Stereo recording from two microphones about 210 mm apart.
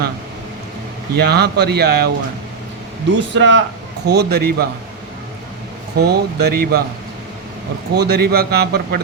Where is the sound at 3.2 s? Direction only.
60° right (ahead or behind).